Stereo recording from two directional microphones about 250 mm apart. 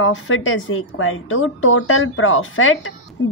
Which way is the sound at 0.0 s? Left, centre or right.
Left.